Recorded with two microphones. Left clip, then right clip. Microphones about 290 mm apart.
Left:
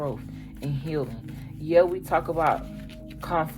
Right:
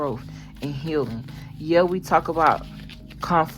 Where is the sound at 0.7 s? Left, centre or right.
Right.